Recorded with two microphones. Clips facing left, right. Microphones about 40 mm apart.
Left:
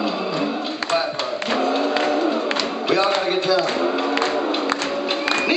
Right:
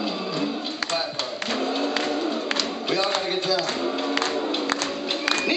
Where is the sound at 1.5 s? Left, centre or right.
Centre.